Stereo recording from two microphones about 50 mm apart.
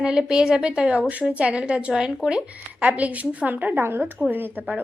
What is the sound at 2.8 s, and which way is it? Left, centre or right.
A woman's voice, right.